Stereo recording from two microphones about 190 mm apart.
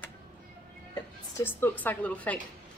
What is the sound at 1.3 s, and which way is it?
A woman's voice, 10° left (ahead or behind).